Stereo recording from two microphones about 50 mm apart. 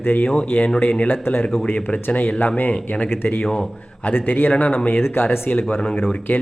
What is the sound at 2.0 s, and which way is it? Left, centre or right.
Speech, left.